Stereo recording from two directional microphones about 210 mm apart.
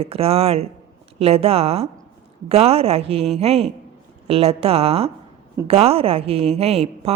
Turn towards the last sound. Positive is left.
turn(degrees=-30)  # may be behind; listen again after turning